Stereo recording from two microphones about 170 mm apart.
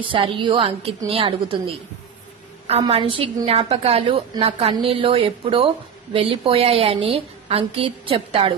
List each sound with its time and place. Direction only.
0.0 s a woman's voice: 30° right (ahead or behind)